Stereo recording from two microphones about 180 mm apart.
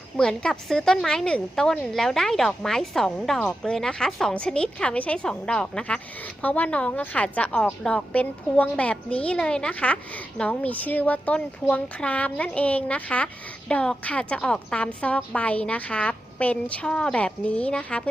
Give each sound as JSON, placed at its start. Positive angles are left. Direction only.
{"t": 0.2, "sound": "a woman's voice", "side_deg": 5}